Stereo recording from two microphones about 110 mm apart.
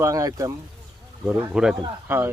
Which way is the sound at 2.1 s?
20° right (ahead or behind).